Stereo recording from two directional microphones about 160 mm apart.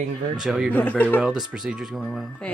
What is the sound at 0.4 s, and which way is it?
Speech, centre (ahead or behind).